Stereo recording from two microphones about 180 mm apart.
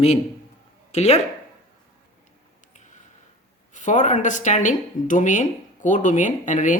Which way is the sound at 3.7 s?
45° left (ahead or behind).